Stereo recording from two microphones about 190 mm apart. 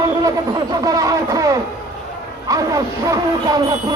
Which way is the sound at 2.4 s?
20° right (ahead or behind).